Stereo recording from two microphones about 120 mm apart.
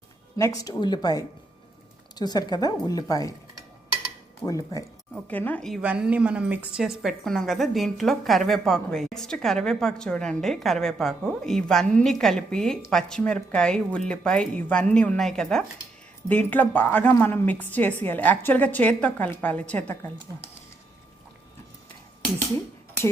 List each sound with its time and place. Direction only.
0.3 s speech: 25° left (ahead or behind)
4.4 s speech: 30° left (ahead or behind)
5.3 s a woman's voice: 15° left (ahead or behind)
5.8 s a woman's voice: 10° right (ahead or behind); by 20.0 s 15° left (ahead or behind)